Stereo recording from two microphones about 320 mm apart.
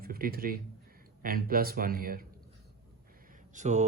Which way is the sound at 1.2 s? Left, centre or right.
Right.